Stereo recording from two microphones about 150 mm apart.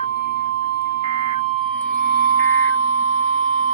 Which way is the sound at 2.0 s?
65° right (ahead or behind).